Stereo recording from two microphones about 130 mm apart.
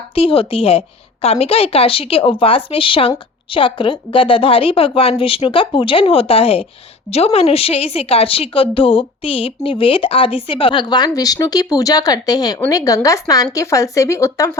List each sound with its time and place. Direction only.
0.1 s a woman's voice: 45° left (ahead or behind); by 14.6 s 20° left (ahead or behind)